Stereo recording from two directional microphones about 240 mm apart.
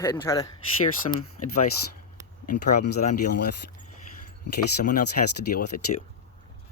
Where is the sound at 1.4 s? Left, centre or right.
Left.